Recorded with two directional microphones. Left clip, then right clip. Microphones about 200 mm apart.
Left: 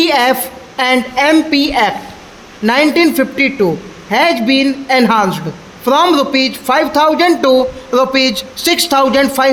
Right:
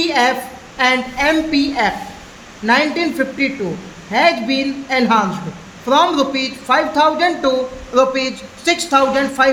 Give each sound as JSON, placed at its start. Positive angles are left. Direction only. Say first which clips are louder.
{"t": 0.0, "sound": "a woman's voice", "louder": "left 4 dB", "side_deg": 55}